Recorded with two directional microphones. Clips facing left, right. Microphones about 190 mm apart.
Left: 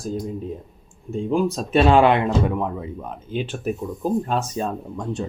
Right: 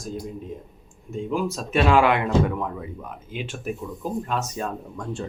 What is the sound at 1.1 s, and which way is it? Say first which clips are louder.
Speech: left 5 dB; 30° left (ahead or behind).